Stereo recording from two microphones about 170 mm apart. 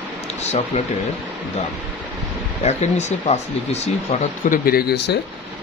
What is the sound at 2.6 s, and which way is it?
Speech, 40° left (ahead or behind).